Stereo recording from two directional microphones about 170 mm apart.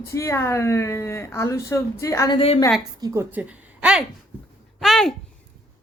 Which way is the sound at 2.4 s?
30° left (ahead or behind).